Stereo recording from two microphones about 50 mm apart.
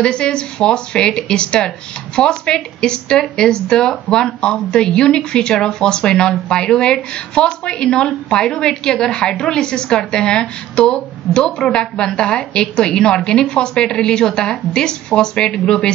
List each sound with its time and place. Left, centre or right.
0.0 s a woman's voice: centre